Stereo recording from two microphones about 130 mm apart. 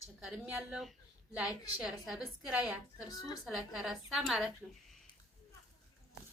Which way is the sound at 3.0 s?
30° left (ahead or behind).